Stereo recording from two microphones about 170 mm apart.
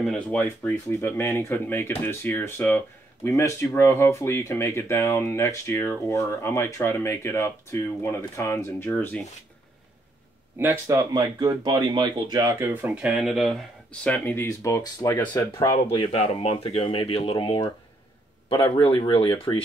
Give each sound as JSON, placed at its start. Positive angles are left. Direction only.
{"t": 0.0, "sound": "speech", "side_deg": 5}
{"t": 10.6, "sound": "speech", "side_deg": -15}
{"t": 15.7, "sound": "speech", "side_deg": 35}